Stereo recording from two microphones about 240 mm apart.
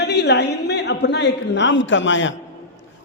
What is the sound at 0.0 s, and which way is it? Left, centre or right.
A man's voice, left.